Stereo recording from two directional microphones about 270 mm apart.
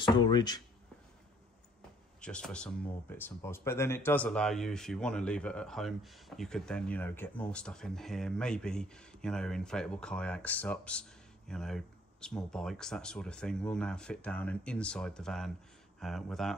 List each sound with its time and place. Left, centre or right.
0.0 s speech: centre
2.2 s speech: centre